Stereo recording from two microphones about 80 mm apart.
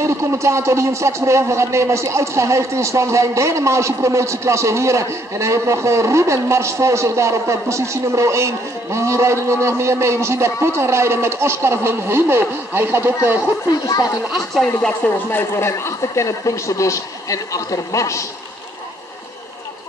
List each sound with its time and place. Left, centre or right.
0.0 s speech: right
13.7 s speech: left
14.3 s speech: centre
15.3 s a man's voice: left